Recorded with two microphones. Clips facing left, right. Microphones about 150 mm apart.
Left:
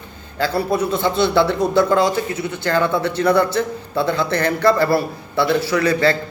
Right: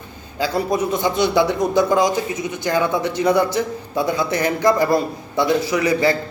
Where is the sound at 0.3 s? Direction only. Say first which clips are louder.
Left 1 dB; 15° right (ahead or behind).